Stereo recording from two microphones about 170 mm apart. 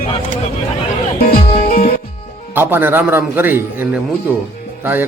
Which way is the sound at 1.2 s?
60° left (ahead or behind).